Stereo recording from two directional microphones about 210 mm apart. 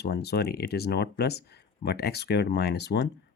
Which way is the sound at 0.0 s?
50° left (ahead or behind).